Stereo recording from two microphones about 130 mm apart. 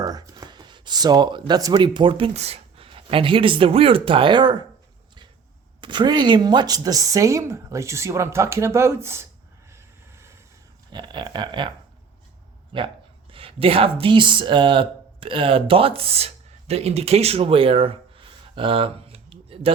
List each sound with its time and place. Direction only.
0.0 s speech: 30° right (ahead or behind)
5.8 s speech: 35° right (ahead or behind); by 9.2 s 20° right (ahead or behind)
9.6 s vehicle: 20° right (ahead or behind)
10.9 s speech: 35° right (ahead or behind)
12.7 s speech: 40° right (ahead or behind)